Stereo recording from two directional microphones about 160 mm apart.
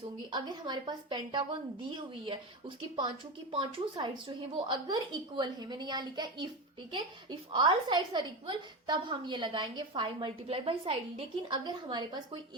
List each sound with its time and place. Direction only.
0.3 s a woman's voice: 30° right (ahead or behind)